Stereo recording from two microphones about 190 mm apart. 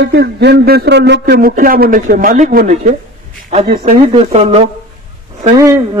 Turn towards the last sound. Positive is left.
turn(degrees=-20)  # may be behind; listen again after turning